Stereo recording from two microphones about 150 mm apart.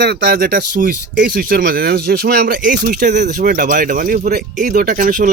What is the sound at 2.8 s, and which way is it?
Speech, 85° right.